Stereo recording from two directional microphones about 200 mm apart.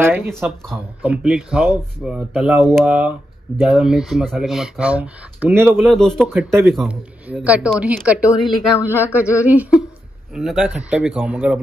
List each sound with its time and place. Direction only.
0.0 s a woman's voice: 10° right (ahead or behind)
5.9 s a woman's voice: centre (ahead or behind)